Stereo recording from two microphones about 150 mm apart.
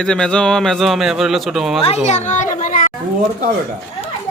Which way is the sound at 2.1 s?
50° left (ahead or behind).